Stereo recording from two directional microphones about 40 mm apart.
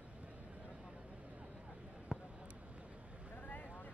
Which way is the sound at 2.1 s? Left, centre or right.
Right.